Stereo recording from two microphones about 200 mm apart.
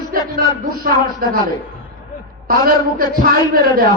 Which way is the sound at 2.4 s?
45° right (ahead or behind).